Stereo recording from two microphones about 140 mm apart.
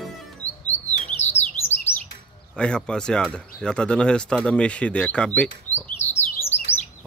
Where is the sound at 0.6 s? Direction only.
55° left (ahead or behind).